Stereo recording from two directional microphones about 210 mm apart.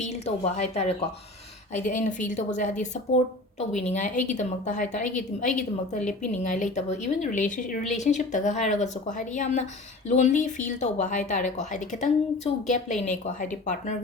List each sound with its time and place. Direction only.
0.0 s a woman's voice: 30° left (ahead or behind)